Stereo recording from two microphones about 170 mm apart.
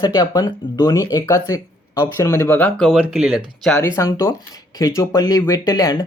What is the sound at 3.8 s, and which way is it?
Speech, 20° left (ahead or behind).